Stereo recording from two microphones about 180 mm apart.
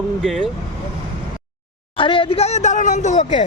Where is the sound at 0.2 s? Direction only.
Centre (ahead or behind).